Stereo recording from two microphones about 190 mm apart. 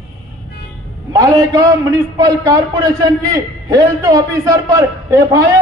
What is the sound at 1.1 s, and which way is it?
A man's voice, 15° right (ahead or behind).